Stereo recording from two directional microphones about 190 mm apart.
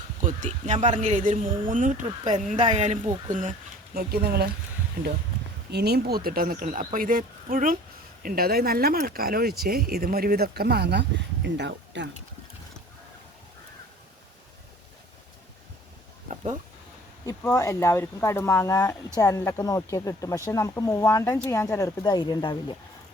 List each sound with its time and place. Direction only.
0.2 s speech: 40° right (ahead or behind)
3.9 s speech: 55° right (ahead or behind)
16.3 s a sound: 35° right (ahead or behind)
17.2 s speech: 15° left (ahead or behind)